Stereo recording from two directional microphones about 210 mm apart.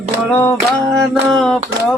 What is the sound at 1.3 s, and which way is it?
Mantra, centre (ahead or behind).